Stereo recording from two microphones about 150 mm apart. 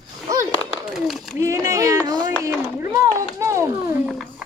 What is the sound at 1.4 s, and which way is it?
Speech, 20° right (ahead or behind).